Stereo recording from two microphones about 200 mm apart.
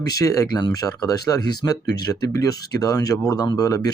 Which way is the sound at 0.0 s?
20° left (ahead or behind).